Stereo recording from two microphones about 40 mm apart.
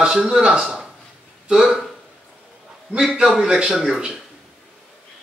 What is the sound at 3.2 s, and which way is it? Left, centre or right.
Speech, centre.